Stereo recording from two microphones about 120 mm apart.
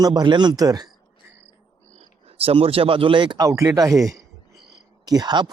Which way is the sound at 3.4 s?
25° right (ahead or behind).